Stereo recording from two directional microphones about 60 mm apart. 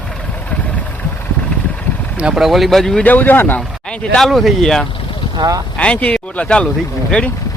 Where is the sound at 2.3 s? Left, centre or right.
Centre.